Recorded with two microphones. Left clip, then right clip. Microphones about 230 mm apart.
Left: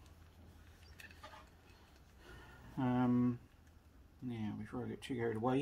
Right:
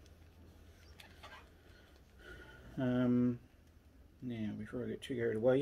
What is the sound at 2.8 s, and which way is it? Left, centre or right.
Speech, centre.